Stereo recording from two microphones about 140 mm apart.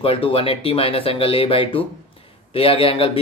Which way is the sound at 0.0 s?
40° left (ahead or behind).